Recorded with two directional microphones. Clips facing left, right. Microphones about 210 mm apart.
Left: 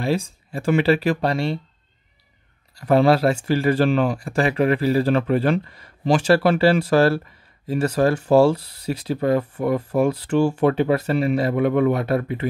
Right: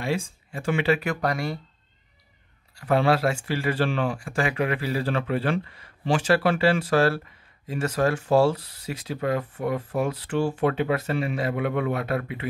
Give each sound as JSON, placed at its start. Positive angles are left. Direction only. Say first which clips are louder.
{"t": 0.0, "sound": "speech", "louder": "left 5 dB", "side_deg": 35}
{"t": 2.7, "sound": "speech", "louder": "left 5 dB", "side_deg": 40}